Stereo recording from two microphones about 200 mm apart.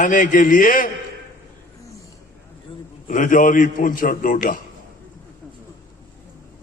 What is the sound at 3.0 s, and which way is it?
A man's voice, 40° left (ahead or behind).